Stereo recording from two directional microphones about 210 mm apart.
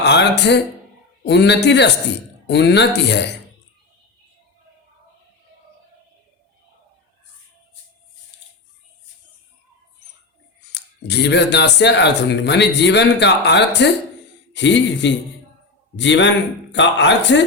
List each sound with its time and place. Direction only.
0.0 s speech: 55° left (ahead or behind)
10.7 s speech: 50° left (ahead or behind)